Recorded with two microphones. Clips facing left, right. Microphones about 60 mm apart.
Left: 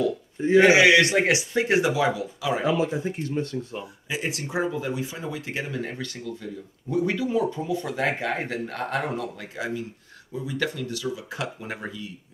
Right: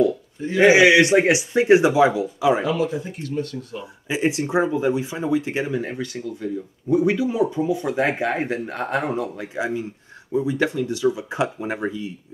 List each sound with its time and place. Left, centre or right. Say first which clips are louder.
0.6 s speech: right 3 dB; centre
2.6 s speech: right 1 dB; left
4.1 s speech: right 8 dB; right